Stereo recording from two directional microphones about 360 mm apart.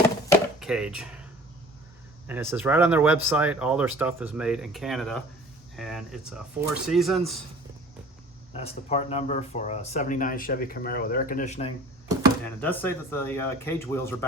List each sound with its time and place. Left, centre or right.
0.3 s a sound: centre
2.2 s speech: centre
8.5 s speech: centre
12.5 s speech: centre